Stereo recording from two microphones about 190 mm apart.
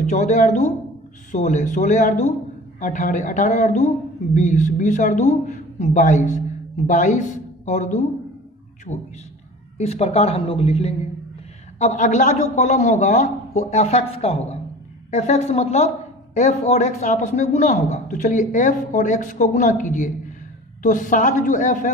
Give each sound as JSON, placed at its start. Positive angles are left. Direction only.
{"t": 0.0, "sound": "a woman's voice", "side_deg": 35}